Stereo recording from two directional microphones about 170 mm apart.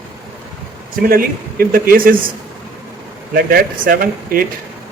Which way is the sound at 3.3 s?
60° right (ahead or behind).